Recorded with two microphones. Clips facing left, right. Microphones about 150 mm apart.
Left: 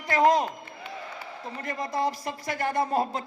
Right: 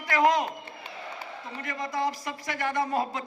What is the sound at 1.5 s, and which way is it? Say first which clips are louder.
A man's voice: left 2 dB; 35° left (ahead or behind).